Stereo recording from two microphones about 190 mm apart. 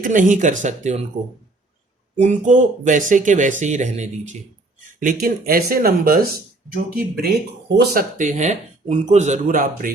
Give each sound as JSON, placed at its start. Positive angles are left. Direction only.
{"t": 0.0, "sound": "speech", "side_deg": -40}
{"t": 2.1, "sound": "speech", "side_deg": -35}
{"t": 5.2, "sound": "speech", "side_deg": -50}